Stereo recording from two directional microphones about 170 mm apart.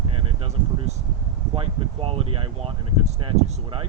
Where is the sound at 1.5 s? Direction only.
35° right (ahead or behind).